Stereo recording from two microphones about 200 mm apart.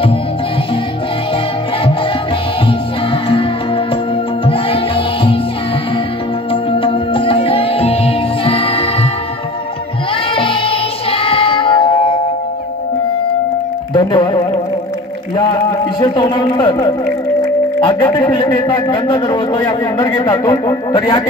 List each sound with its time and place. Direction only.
3.3 s music: 25° left (ahead or behind)
6.5 s music: 25° left (ahead or behind)
10.3 s music: 25° left (ahead or behind)
13.9 s music: 25° left (ahead or behind)
16.0 s speech: 20° left (ahead or behind)